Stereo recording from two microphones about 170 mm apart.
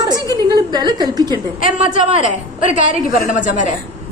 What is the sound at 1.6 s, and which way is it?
A woman's voice, 50° left (ahead or behind).